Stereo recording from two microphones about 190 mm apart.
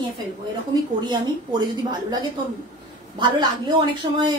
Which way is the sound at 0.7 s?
20° right (ahead or behind).